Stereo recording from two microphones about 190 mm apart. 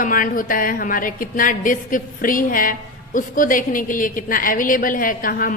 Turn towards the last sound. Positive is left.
turn(degrees=45)  # may be behind; listen again after turning